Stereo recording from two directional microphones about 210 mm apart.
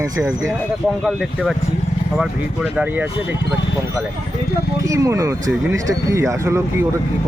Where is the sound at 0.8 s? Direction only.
Centre (ahead or behind).